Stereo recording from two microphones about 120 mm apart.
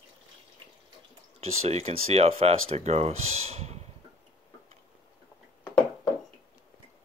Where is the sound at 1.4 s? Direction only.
60° right (ahead or behind).